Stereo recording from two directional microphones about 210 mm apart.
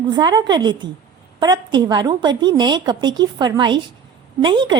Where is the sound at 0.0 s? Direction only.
20° right (ahead or behind).